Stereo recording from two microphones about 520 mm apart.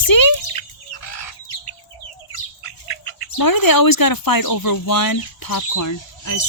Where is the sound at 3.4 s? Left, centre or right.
Left.